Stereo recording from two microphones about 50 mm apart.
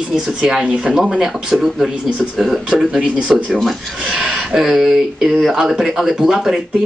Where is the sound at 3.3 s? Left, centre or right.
Centre.